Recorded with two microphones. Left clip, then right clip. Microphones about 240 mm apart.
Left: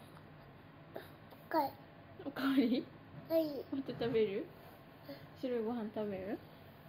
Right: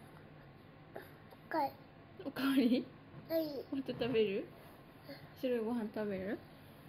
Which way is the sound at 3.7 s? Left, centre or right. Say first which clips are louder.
Right 3 dB; right.